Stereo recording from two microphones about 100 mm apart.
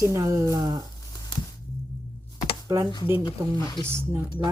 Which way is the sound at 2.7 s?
35° right (ahead or behind).